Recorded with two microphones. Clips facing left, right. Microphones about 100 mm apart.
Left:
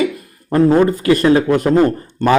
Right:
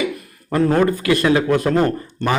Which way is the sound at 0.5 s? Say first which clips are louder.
Left 4 dB; 25° left (ahead or behind).